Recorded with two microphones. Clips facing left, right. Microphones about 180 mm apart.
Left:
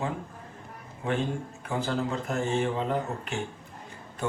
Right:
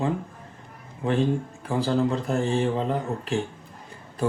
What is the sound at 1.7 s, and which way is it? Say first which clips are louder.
Speech: right 6 dB; 35° right (ahead or behind).